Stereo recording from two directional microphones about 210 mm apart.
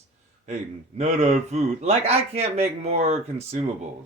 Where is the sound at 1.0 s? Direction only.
30° right (ahead or behind).